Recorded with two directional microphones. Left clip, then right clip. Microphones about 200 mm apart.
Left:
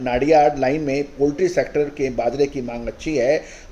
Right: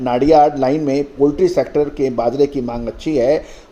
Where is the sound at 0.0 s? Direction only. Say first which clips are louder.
Right 4 dB; 30° right (ahead or behind).